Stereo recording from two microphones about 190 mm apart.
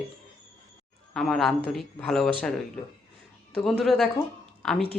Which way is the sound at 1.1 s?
Centre (ahead or behind).